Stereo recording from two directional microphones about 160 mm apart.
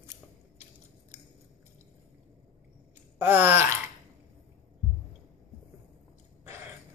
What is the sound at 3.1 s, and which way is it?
Groan, 15° right (ahead or behind).